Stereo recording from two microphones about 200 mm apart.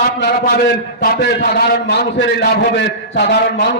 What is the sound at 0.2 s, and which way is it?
A man's voice, 50° left (ahead or behind).